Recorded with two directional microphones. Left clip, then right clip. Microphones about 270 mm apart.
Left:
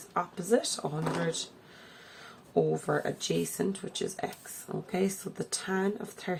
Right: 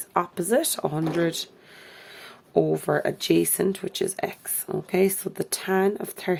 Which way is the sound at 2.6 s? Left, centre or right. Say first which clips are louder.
Right 6 dB; right.